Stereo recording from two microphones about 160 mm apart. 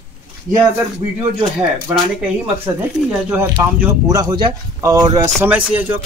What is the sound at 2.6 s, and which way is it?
Speech, 10° right (ahead or behind).